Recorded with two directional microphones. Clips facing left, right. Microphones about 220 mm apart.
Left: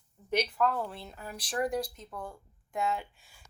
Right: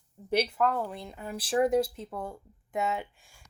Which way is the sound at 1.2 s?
25° right (ahead or behind).